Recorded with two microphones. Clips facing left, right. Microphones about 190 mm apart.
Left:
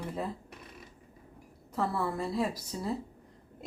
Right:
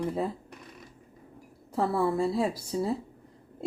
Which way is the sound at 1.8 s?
25° right (ahead or behind).